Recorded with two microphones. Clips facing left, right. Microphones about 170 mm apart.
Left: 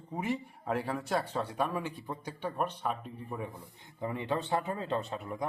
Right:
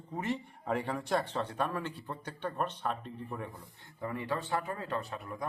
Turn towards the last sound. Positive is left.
turn(degrees=20)  # may be behind; listen again after turning